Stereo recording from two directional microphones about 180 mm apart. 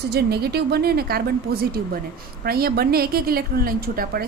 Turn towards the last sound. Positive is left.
turn(degrees=-55)  # may be behind; listen again after turning